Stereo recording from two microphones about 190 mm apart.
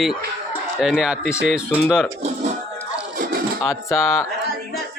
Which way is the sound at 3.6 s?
15° left (ahead or behind).